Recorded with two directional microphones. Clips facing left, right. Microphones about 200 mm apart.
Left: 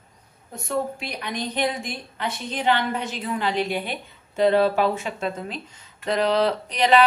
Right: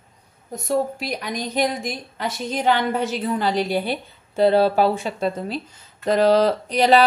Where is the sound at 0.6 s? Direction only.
40° right (ahead or behind).